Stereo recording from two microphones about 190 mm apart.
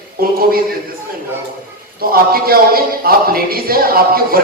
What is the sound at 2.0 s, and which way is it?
Speech, 50° right (ahead or behind).